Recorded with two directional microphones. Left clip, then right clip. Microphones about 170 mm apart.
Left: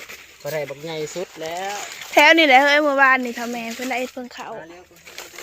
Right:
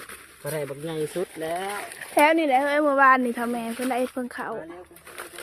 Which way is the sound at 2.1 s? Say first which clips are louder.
Left 7 dB; 5° left (ahead or behind).